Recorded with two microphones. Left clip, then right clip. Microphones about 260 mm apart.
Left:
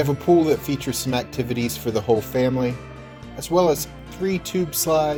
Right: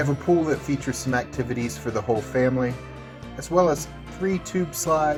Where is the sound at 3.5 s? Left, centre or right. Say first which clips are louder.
Left 2 dB; left.